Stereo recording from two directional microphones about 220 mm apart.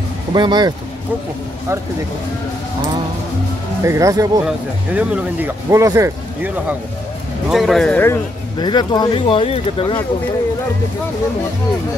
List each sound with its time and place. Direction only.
0.3 s speech: 20° right (ahead or behind)
3.8 s speech: 15° right (ahead or behind)
7.4 s speech: centre (ahead or behind); by 10.0 s 25° left (ahead or behind)